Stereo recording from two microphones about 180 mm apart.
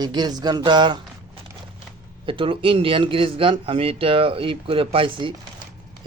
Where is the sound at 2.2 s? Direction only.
30° right (ahead or behind).